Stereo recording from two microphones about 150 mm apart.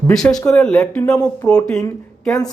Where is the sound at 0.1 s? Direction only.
5° left (ahead or behind).